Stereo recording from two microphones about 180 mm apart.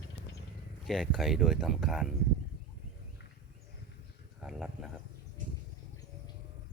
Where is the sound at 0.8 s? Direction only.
Centre (ahead or behind).